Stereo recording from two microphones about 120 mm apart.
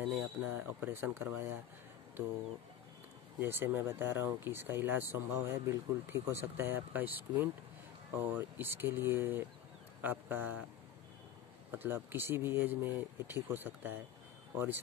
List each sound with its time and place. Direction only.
0.4 s speech: 15° right (ahead or behind)
3.3 s speech: 20° right (ahead or behind)
11.7 s speech: 15° right (ahead or behind)